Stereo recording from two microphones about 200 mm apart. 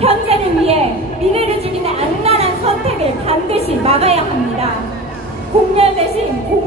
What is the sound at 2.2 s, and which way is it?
A woman's voice, 30° right (ahead or behind).